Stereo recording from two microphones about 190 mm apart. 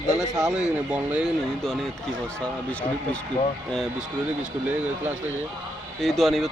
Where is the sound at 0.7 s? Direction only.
5° right (ahead or behind).